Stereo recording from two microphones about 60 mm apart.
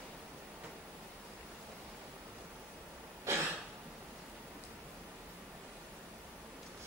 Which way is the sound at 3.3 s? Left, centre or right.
Right.